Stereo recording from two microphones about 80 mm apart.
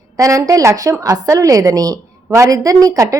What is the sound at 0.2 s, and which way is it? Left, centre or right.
A woman's voice, right.